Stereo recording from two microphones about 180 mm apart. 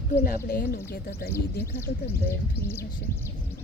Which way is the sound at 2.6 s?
15° left (ahead or behind).